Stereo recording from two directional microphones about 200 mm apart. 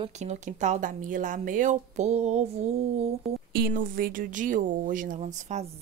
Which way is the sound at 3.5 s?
45° right (ahead or behind).